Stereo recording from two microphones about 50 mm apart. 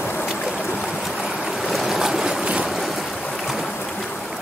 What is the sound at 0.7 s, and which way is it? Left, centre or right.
Stream, left.